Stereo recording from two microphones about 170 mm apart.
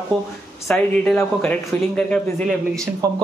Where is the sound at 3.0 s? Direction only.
20° right (ahead or behind).